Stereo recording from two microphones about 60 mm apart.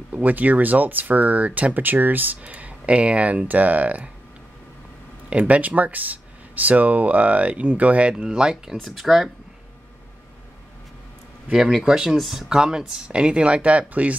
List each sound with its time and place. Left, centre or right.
0.1 s speech: right
5.3 s speech: right; by 9.3 s centre
11.5 s speech: centre; by 14.1 s right